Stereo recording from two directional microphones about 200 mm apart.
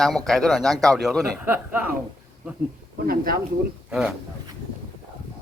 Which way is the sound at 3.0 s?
45° right (ahead or behind).